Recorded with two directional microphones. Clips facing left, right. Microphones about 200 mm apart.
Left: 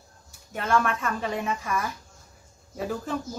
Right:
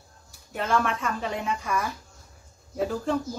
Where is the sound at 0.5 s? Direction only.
Centre (ahead or behind).